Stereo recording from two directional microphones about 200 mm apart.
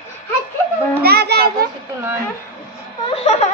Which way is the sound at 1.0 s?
55° right (ahead or behind).